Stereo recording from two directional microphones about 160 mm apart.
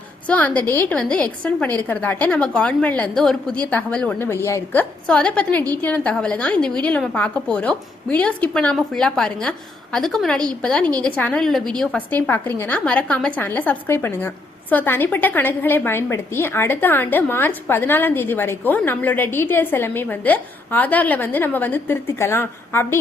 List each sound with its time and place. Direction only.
0.3 s a woman's voice: 10° left (ahead or behind)